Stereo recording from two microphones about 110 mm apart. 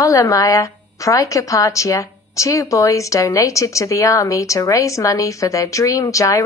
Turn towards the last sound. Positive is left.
turn(degrees=30)  # may be behind; listen again after turning